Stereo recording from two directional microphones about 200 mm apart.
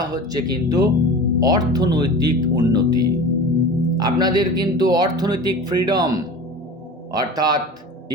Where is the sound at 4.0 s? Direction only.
20° right (ahead or behind).